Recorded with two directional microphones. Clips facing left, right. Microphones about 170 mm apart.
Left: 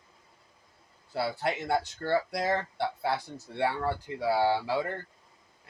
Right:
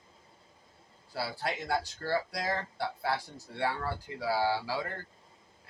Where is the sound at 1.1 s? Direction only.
25° left (ahead or behind).